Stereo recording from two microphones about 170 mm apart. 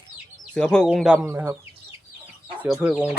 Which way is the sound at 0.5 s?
5° left (ahead or behind).